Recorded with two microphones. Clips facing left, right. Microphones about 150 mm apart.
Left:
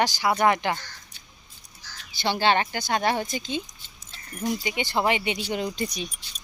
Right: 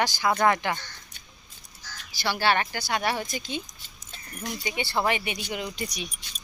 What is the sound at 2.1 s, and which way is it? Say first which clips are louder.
Speech: left 2 dB; 20° left (ahead or behind).